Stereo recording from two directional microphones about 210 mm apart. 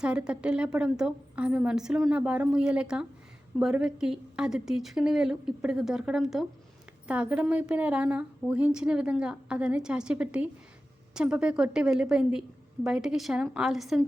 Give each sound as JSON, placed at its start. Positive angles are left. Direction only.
{"t": 0.0, "sound": "a woman's voice", "side_deg": -5}